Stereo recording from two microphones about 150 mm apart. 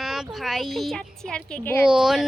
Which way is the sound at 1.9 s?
5° right (ahead or behind).